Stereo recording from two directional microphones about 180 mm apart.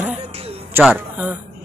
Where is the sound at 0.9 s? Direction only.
10° right (ahead or behind).